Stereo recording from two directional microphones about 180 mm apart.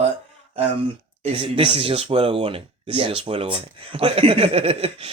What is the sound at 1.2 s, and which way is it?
Speech, 30° right (ahead or behind).